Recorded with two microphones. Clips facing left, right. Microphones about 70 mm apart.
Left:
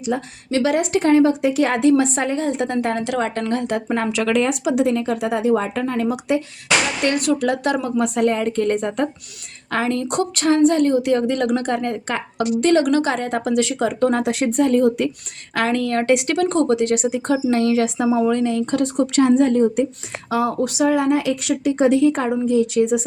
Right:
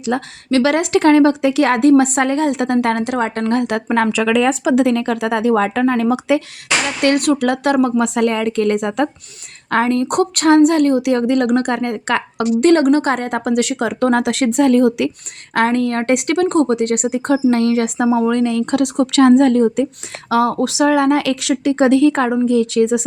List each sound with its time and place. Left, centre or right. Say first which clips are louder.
0.1 s speech: right 4 dB; right
3.0 s a woman's voice: right 3 dB; right
3.5 s speech: right 4 dB; right
4.8 s a woman's voice: right 3 dB; right
7.0 s a woman's voice: right 4 dB; right
9.6 s speech: right 5 dB; right
12.4 s speech: right 4 dB; right
15.5 s a woman's voice: right 4 dB; right